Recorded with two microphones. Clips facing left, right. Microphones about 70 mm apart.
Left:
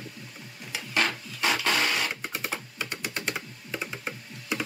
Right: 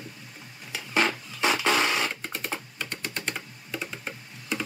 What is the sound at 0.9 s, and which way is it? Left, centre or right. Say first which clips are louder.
Music: right 2 dB; centre.